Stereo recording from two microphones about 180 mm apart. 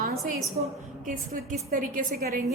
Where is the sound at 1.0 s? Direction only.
50° right (ahead or behind).